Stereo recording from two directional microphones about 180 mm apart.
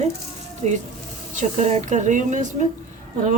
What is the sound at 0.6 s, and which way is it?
A woman's voice, 40° right (ahead or behind).